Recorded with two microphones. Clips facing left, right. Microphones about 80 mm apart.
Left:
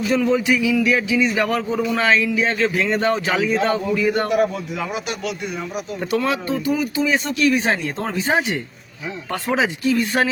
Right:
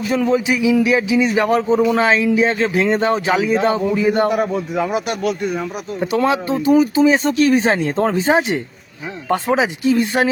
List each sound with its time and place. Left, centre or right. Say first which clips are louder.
0.3 s speech: right 2 dB; centre
4.7 s speech: right 6 dB; right
6.2 s speech: right 5 dB; right